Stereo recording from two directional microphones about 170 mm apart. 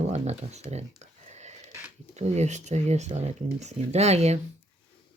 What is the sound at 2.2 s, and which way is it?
Speech, 40° right (ahead or behind).